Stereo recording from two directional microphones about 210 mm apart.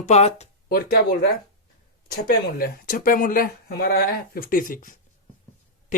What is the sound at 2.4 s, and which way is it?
Speech, 45° left (ahead or behind).